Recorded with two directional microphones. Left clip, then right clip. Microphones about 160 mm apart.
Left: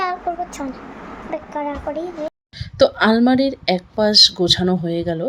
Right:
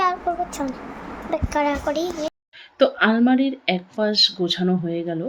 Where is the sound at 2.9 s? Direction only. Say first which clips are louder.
Left 3 dB; 70° left (ahead or behind).